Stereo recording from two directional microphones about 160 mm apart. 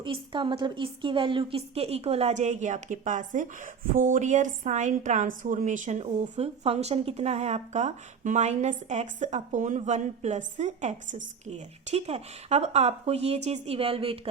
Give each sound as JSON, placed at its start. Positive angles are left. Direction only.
{"t": 0.0, "sound": "a woman's voice", "side_deg": -30}